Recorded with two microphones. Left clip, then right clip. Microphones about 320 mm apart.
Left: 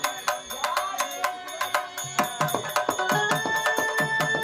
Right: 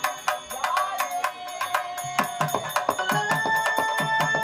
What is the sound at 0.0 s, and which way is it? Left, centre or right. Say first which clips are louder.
Music: right 1 dB; centre.